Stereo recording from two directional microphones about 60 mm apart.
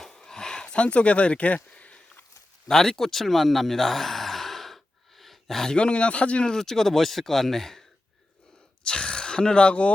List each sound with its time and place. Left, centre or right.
0.0 s a sound: centre
2.6 s gasp: centre
5.7 s speech: centre